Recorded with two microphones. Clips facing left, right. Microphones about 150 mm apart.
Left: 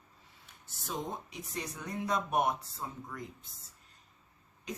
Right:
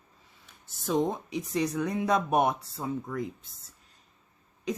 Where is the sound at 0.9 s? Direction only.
90° right.